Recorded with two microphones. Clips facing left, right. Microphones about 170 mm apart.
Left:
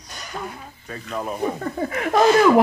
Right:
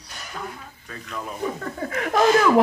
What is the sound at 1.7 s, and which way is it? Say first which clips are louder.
Speech: left 3 dB; 20° left (ahead or behind).